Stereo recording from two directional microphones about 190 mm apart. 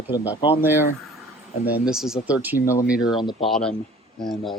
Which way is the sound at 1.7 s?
5° right (ahead or behind).